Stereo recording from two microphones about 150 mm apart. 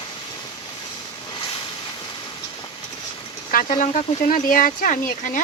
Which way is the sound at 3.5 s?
65° left (ahead or behind).